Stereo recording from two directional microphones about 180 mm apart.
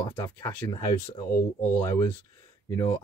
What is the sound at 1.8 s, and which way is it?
Speech, 15° left (ahead or behind).